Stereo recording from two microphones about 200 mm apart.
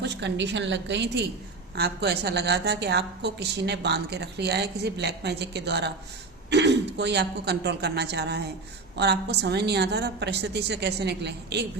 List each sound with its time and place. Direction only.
0.0 s a woman's voice: 60° right (ahead or behind)